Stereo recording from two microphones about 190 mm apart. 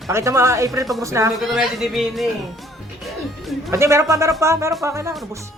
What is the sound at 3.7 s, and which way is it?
Speech, 15° right (ahead or behind).